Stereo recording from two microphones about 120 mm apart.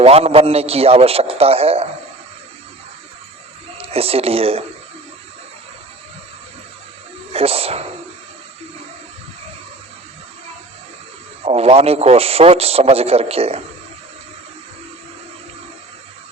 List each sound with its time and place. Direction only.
0.0 s a man's voice: 60° right (ahead or behind)
3.8 s speech: 55° right (ahead or behind)
7.3 s a man's voice: 55° right (ahead or behind)
11.4 s a man's voice: 55° right (ahead or behind)